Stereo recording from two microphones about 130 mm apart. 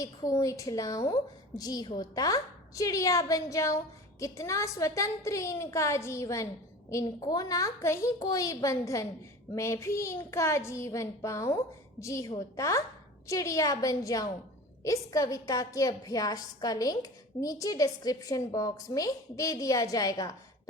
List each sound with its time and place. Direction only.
0.0 s a woman's voice: 25° left (ahead or behind)